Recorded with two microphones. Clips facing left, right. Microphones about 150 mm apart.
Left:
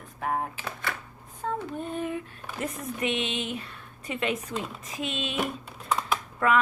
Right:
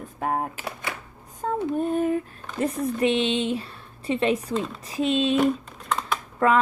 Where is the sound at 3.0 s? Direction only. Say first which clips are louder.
Right 7 dB; 30° right (ahead or behind).